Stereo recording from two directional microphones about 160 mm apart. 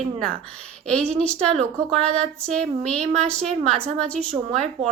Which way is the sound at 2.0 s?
40° right (ahead or behind).